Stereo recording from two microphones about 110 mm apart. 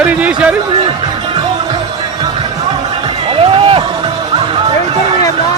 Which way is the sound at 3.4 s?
55° right (ahead or behind).